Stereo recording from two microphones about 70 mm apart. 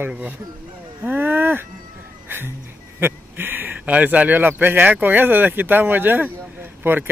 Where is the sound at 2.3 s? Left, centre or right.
Right.